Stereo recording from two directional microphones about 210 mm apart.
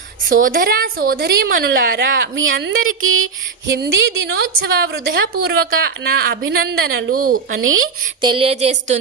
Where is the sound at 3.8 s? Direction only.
55° right (ahead or behind).